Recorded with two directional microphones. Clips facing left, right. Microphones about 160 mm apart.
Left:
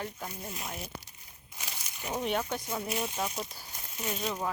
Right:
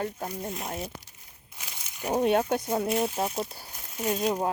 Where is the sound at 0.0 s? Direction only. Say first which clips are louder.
Right 7 dB; 45° right (ahead or behind).